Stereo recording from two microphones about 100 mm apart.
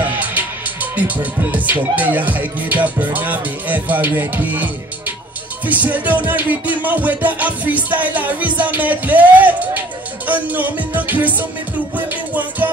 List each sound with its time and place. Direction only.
0.0 s music: 20° right (ahead or behind)
5.7 s music: 15° right (ahead or behind)